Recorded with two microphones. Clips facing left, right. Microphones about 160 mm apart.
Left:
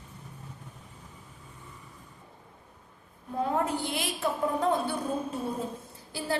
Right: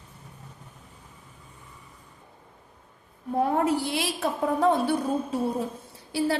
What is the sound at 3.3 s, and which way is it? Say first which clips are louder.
A woman's voice: right 5 dB; 70° right (ahead or behind).